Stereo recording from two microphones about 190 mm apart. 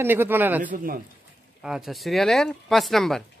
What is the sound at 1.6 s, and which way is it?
Speech, centre (ahead or behind).